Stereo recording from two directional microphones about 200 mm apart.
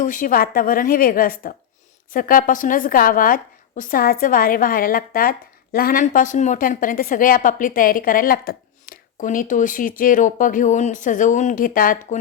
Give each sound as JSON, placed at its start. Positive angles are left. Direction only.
{"t": 0.0, "sound": "a woman's voice", "side_deg": 40}